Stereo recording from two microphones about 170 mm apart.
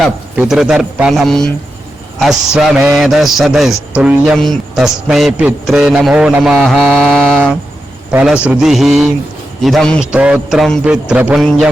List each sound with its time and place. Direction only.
0.0 s a man's voice: 5° right (ahead or behind)
2.6 s a man's voice: centre (ahead or behind)
8.1 s a man's voice: 5° right (ahead or behind)